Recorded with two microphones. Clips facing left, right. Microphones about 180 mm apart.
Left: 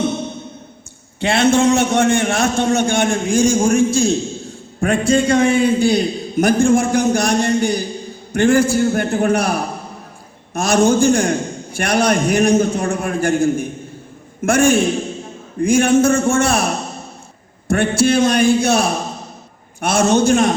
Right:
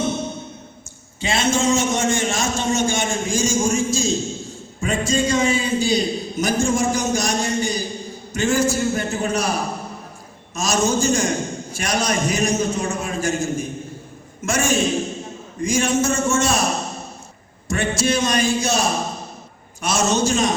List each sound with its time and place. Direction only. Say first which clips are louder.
1.2 s a man's voice: left 6 dB; 60° left (ahead or behind)